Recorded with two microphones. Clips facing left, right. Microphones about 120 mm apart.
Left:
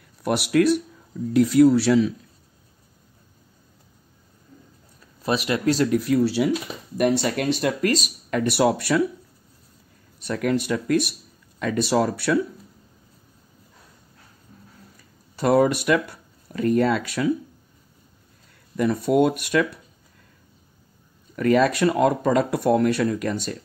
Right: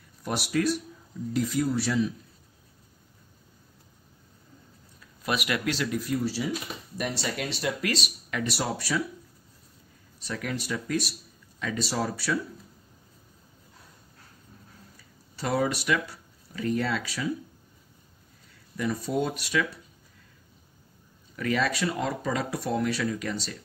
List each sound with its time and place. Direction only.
0.2 s speech: 65° left (ahead or behind); by 2.1 s 85° left
5.0 s speech: 30° left (ahead or behind)
5.9 s speech: 75° left (ahead or behind)
7.0 s speech: 55° left (ahead or behind)
10.1 s speech: 55° left (ahead or behind)
15.3 s speech: 50° left (ahead or behind)
18.8 s speech: 60° left (ahead or behind)
21.4 s speech: 50° left (ahead or behind)